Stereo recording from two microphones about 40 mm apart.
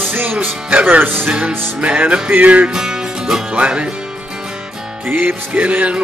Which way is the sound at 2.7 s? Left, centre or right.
Centre.